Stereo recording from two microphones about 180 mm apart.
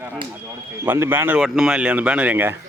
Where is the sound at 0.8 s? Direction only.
10° right (ahead or behind).